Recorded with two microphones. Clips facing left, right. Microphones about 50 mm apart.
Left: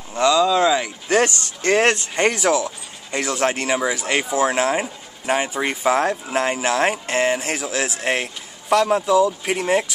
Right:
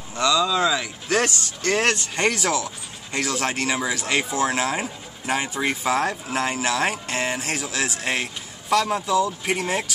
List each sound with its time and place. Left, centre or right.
0.1 s speech: centre
2.1 s speech: centre